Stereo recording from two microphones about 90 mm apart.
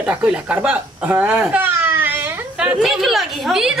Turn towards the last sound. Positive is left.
turn(degrees=-5)  # may be behind; listen again after turning